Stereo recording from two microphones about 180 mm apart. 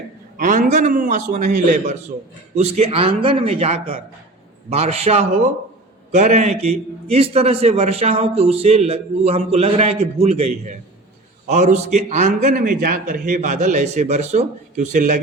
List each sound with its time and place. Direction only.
0.3 s a man's voice: 50° right (ahead or behind)